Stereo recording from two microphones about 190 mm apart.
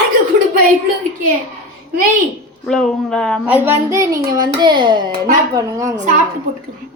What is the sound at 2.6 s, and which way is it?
Speech, 5° left (ahead or behind).